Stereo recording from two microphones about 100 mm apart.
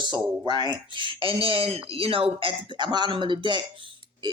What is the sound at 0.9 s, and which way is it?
Speech, 55° right (ahead or behind).